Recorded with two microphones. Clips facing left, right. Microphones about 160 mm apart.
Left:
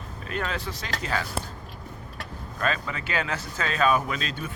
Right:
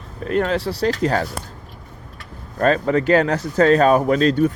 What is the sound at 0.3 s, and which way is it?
Speech, 75° right (ahead or behind).